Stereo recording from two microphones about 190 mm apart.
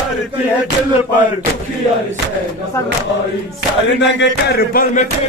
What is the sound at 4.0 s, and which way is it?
Music, 70° left (ahead or behind).